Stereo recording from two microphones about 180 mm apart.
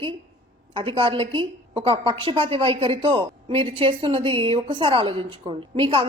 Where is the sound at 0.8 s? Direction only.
25° right (ahead or behind).